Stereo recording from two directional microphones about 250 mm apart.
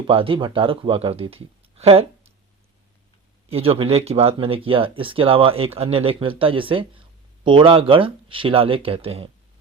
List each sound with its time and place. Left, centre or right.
0.1 s speech: right
3.5 s speech: right